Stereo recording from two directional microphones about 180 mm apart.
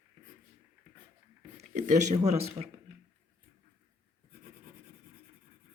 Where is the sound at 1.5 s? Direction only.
40° right (ahead or behind).